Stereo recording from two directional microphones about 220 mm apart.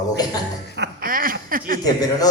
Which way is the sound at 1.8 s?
15° left (ahead or behind).